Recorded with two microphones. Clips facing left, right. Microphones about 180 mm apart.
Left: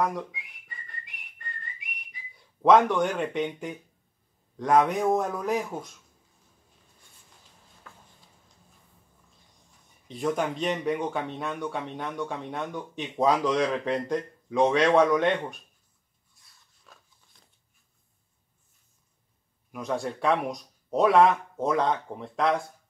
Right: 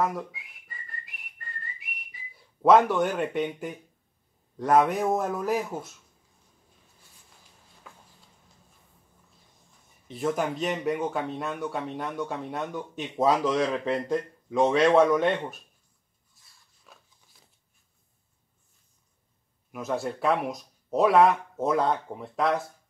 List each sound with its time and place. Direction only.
0.0 s whistling: 5° right (ahead or behind)
2.3 s speech: 5° right (ahead or behind)
10.0 s speech: 5° right (ahead or behind)
16.3 s dog: centre (ahead or behind)
19.7 s speech: centre (ahead or behind)